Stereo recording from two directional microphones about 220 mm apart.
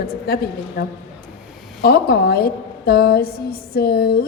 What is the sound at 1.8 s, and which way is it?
A woman's voice, 45° left (ahead or behind).